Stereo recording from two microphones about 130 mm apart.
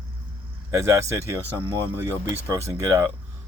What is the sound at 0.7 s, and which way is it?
Speech, 20° right (ahead or behind).